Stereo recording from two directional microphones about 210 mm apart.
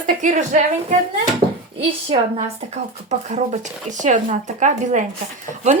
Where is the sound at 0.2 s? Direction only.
35° right (ahead or behind).